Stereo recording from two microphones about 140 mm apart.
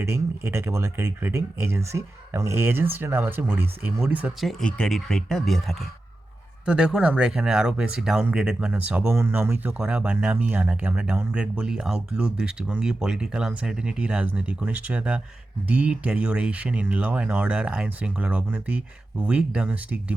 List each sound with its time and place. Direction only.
0.0 s speech: 20° right (ahead or behind)